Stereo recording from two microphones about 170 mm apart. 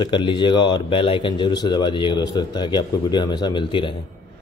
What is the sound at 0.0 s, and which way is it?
Speech, 25° left (ahead or behind).